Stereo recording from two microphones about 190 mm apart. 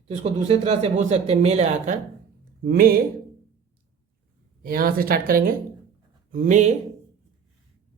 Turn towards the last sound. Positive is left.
turn(degrees=-40)  # may be behind; listen again after turning